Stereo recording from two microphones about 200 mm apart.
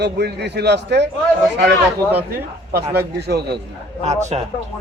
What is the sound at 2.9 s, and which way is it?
Speech, 55° right (ahead or behind).